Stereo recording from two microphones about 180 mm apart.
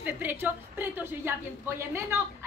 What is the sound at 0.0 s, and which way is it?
A woman's voice, 10° right (ahead or behind).